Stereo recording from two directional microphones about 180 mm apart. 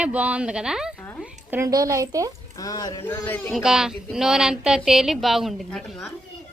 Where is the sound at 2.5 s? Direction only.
20° left (ahead or behind).